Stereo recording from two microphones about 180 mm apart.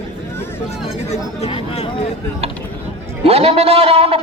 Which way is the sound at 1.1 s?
35° left (ahead or behind).